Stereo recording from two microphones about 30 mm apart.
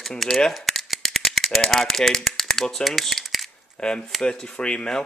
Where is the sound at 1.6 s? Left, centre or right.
Centre.